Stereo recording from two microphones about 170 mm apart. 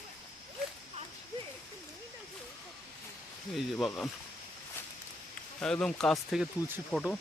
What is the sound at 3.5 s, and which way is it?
Speech, centre (ahead or behind).